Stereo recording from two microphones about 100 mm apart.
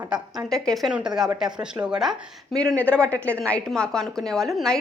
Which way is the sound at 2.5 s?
10° left (ahead or behind).